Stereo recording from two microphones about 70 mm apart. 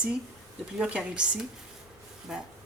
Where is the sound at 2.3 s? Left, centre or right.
Centre.